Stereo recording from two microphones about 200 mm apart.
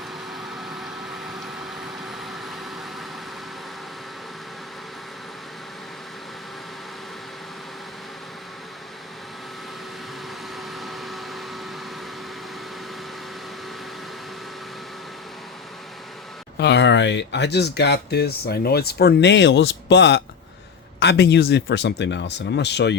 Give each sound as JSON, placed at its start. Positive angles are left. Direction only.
{"t": 0.3, "sound": "vehicle", "side_deg": 0}
{"t": 10.6, "sound": "vacuum cleaner", "side_deg": 0}
{"t": 16.6, "sound": "speech", "side_deg": 60}